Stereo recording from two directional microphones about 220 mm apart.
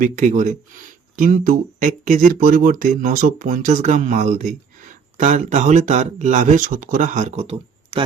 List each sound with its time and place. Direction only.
0.0 s speech: 35° right (ahead or behind)